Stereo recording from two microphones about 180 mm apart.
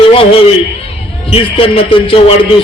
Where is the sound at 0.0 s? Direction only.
30° left (ahead or behind).